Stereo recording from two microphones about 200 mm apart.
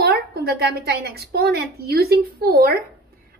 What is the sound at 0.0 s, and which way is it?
A woman's voice, 50° right (ahead or behind).